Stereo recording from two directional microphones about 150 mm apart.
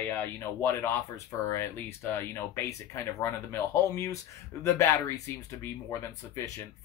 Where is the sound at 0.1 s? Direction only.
15° left (ahead or behind).